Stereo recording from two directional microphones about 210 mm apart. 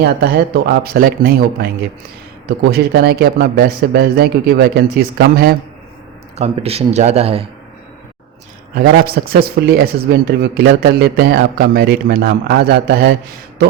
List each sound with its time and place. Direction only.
0.0 s speech: 50° right (ahead or behind)
6.3 s speech: 30° right (ahead or behind)
8.8 s speech: 45° right (ahead or behind)